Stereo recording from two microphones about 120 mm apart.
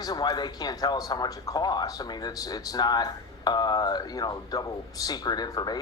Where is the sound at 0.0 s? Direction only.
35° left (ahead or behind).